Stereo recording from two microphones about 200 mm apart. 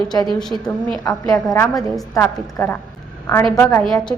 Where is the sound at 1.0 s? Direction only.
20° left (ahead or behind).